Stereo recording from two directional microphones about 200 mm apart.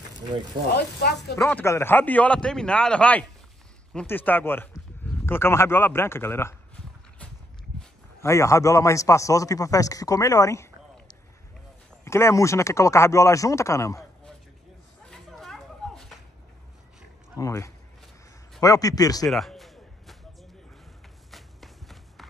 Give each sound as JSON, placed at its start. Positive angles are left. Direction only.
{"t": 0.3, "sound": "speech", "side_deg": -25}
{"t": 0.7, "sound": "speech", "side_deg": 55}
{"t": 1.3, "sound": "a man's voice", "side_deg": 15}
{"t": 8.2, "sound": "a man's voice", "side_deg": 15}
{"t": 15.0, "sound": "a sound", "side_deg": 0}
{"t": 17.4, "sound": "a man's voice", "side_deg": 15}
{"t": 19.2, "sound": "a sound", "side_deg": 0}
{"t": 21.3, "sound": "walk", "side_deg": 0}